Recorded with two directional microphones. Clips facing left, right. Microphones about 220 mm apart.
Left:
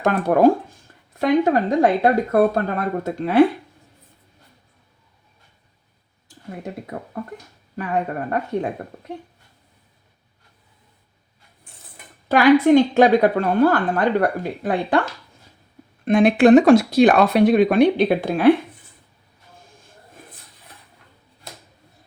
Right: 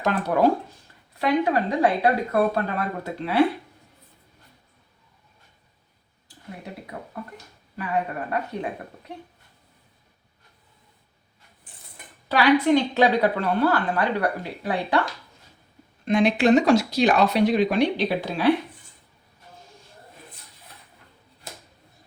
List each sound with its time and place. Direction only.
0.0 s a woman's voice: 50° left (ahead or behind)
6.9 s speech: 40° left (ahead or behind)
12.3 s a woman's voice: 50° left (ahead or behind)
16.0 s a woman's voice: 55° left (ahead or behind)